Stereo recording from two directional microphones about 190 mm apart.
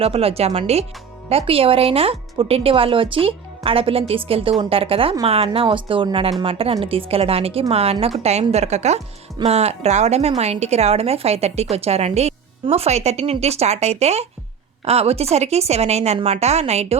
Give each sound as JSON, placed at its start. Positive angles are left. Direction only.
{"t": 0.0, "sound": "speech", "side_deg": -30}